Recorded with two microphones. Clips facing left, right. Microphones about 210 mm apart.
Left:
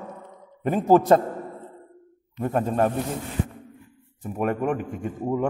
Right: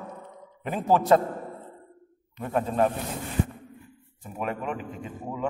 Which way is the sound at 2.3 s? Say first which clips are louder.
Left 3 dB; 45° left (ahead or behind).